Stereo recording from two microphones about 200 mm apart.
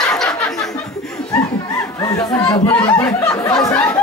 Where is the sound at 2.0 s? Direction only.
15° left (ahead or behind).